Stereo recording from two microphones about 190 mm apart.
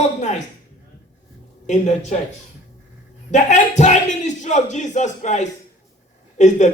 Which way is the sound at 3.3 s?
40° left (ahead or behind).